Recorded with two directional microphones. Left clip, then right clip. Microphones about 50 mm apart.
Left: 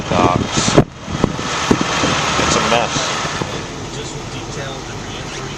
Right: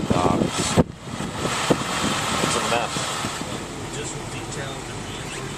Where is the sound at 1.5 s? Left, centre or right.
Centre.